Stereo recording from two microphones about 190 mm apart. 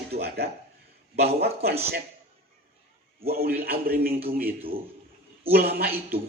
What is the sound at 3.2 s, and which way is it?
Speech, 50° right (ahead or behind).